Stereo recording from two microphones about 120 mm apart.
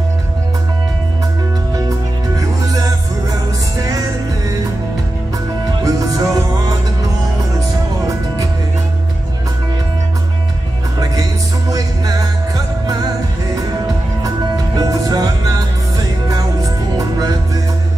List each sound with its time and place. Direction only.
1.9 s music: 30° right (ahead or behind)
5.9 s music: 30° right (ahead or behind)
11.7 s music: 30° right (ahead or behind)
14.4 s music: 30° right (ahead or behind)